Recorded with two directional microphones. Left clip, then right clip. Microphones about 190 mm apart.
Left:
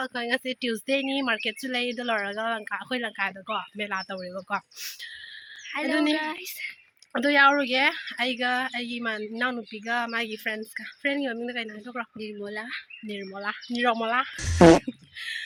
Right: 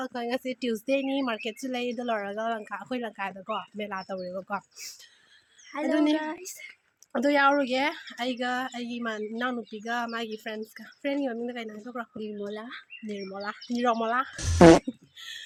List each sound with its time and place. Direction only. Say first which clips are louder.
0.0 s speech: left 3 dB; centre (ahead or behind)
12.1 s speech: left 1 dB; 15° right (ahead or behind)
13.3 s speech: left 3 dB; centre (ahead or behind)